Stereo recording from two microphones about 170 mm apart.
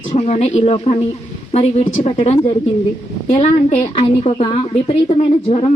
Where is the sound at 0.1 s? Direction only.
40° left (ahead or behind).